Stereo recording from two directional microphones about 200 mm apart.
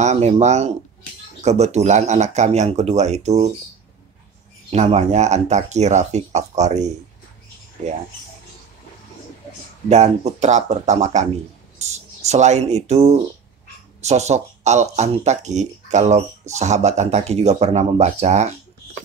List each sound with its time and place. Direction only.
0.0 s speech: 35° right (ahead or behind)
4.6 s speech: 30° right (ahead or behind)
9.8 s speech: 35° right (ahead or behind)
12.3 s speech: 35° right (ahead or behind)